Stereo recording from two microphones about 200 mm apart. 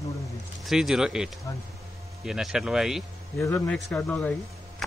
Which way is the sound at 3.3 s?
10° left (ahead or behind).